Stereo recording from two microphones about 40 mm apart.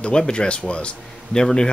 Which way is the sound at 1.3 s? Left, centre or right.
Centre.